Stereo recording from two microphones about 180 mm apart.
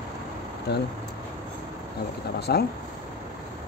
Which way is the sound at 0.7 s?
70° left (ahead or behind).